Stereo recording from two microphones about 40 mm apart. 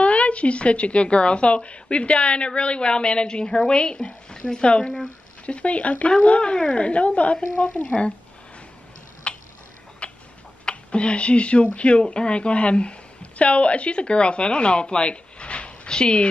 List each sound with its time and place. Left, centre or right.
0.0 s speech: left
6.5 s speech: left
7.7 s speech: centre
9.3 s tick-tock: left
10.6 s speech: left